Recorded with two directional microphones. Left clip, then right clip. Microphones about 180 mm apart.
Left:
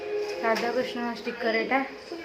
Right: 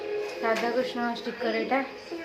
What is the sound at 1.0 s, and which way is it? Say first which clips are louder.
Speech: even; 5° right (ahead or behind).